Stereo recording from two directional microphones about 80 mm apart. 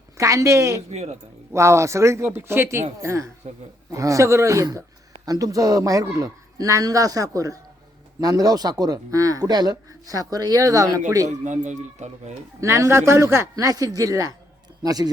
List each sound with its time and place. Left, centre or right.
0.2 s a man's voice: right
12.5 s a man's voice: right